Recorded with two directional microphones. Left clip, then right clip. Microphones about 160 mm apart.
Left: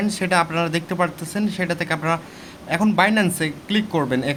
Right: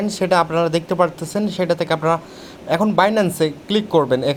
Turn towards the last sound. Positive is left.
turn(degrees=-25)  # may be behind; listen again after turning